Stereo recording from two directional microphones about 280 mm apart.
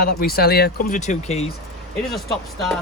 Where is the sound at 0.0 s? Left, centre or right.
Left.